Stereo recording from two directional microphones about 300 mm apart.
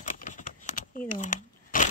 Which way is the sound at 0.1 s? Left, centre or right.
Left.